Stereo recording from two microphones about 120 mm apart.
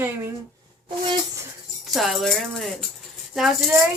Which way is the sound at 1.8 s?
Centre (ahead or behind).